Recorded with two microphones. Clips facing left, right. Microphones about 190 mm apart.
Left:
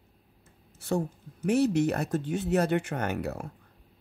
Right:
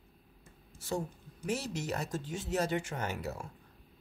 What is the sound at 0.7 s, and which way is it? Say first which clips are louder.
Speech: left 7 dB; 65° left (ahead or behind).